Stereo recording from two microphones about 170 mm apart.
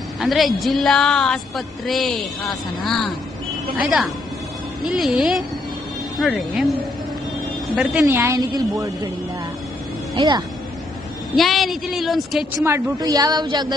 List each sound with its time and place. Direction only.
0.2 s a woman's voice: centre (ahead or behind)
7.7 s a woman's voice: 5° right (ahead or behind)
10.1 s a woman's voice: 25° right (ahead or behind)
11.3 s a woman's voice: centre (ahead or behind)
12.5 s a woman's voice: 20° right (ahead or behind)